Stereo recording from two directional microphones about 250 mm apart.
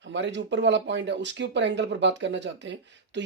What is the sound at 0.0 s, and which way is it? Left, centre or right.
Speech, right.